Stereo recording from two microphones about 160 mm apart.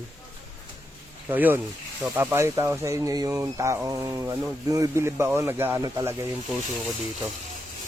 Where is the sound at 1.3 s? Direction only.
10° right (ahead or behind).